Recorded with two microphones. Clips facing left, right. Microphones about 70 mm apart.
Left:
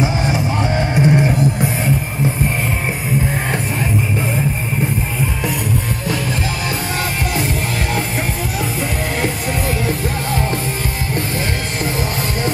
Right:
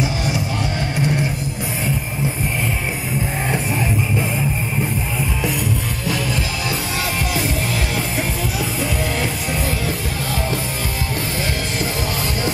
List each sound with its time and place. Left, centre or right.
0.0 s music: left